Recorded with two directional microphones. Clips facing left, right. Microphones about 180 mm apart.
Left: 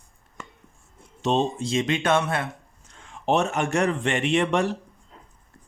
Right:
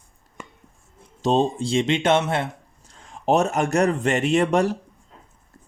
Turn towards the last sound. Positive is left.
turn(degrees=-40)  # may be behind; listen again after turning